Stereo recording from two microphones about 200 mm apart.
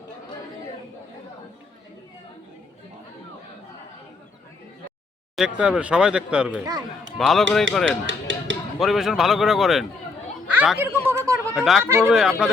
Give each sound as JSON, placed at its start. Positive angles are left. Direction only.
{"t": 5.4, "sound": "speech", "side_deg": -5}
{"t": 8.0, "sound": "speech", "side_deg": -70}
{"t": 8.8, "sound": "speech", "side_deg": 0}
{"t": 10.5, "sound": "a sound", "side_deg": -5}
{"t": 11.5, "sound": "speech", "side_deg": 0}
{"t": 11.9, "sound": "speech", "side_deg": -10}
{"t": 12.1, "sound": "speech", "side_deg": 0}